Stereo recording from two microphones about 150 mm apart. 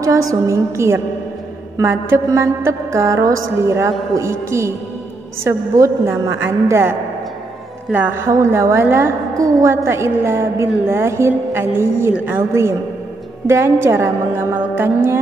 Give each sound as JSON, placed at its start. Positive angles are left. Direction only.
{"t": 0.0, "sound": "music", "side_deg": -20}
{"t": 5.5, "sound": "a woman's voice", "side_deg": -20}
{"t": 8.3, "sound": "music", "side_deg": -20}
{"t": 9.8, "sound": "a woman's voice", "side_deg": -20}